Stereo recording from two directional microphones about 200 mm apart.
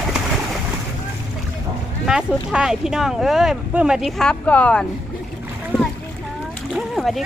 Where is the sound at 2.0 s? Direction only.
5° right (ahead or behind).